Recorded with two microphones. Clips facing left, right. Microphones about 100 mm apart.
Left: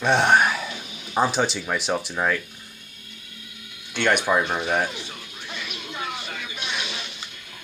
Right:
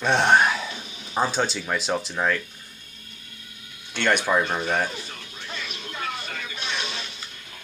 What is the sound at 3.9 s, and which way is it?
Speech, 15° left (ahead or behind).